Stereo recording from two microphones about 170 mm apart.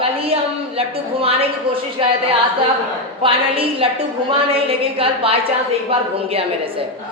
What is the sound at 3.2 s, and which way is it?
A woman's voice, 35° right (ahead or behind).